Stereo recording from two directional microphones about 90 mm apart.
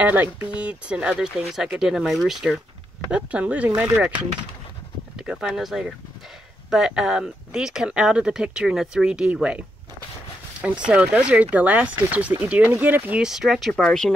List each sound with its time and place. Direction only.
0.0 s speech: 20° right (ahead or behind); by 2.6 s centre (ahead or behind)
3.1 s speech: 15° right (ahead or behind)
5.1 s a sound: 5° right (ahead or behind)
5.5 s speech: centre (ahead or behind)
13.3 s speech: 5° right (ahead or behind)